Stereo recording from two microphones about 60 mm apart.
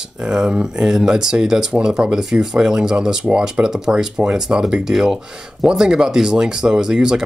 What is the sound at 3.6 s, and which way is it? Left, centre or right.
Speech, centre.